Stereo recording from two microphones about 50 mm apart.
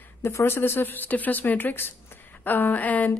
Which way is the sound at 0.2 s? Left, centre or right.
Left.